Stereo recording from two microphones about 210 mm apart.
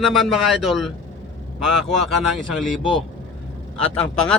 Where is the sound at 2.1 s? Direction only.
Centre (ahead or behind).